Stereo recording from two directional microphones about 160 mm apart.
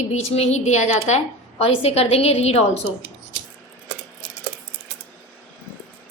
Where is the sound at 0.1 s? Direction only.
40° left (ahead or behind).